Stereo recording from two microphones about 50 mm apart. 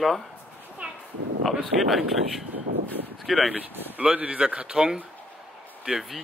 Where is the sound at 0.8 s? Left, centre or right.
Right.